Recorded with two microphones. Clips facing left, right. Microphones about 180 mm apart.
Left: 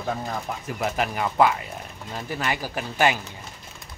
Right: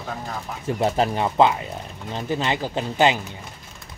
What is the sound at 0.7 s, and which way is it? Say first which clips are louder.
Speech: right 6 dB; 30° right (ahead or behind).